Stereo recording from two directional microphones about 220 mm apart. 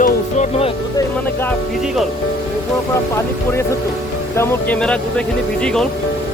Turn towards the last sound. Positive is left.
turn(degrees=5)  # may be behind; listen again after turning